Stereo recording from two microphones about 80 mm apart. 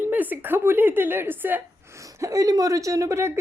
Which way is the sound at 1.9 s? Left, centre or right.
Right.